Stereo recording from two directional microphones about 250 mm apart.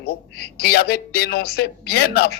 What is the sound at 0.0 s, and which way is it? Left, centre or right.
A man's voice, left.